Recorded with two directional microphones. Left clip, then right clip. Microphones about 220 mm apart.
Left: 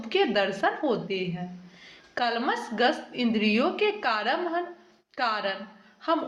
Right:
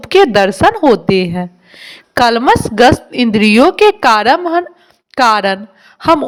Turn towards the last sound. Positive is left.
turn(degrees=-45)  # may be behind; listen again after turning